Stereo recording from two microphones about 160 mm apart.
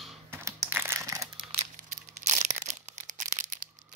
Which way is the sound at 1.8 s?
50° right (ahead or behind).